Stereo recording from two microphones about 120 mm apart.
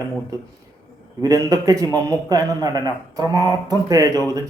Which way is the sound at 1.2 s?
30° right (ahead or behind).